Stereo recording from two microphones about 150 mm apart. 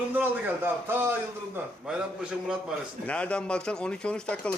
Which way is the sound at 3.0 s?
10° left (ahead or behind).